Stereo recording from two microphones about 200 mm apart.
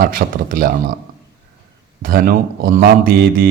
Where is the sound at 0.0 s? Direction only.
45° right (ahead or behind).